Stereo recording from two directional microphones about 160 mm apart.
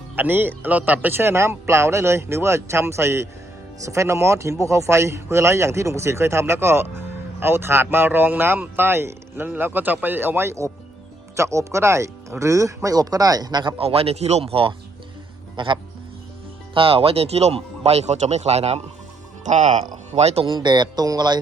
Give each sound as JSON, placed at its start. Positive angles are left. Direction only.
{"t": 0.2, "sound": "speech", "side_deg": -10}